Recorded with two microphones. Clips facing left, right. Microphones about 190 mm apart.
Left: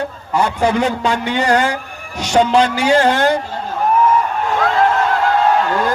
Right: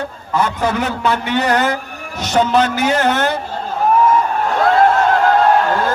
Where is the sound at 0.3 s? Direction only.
15° left (ahead or behind).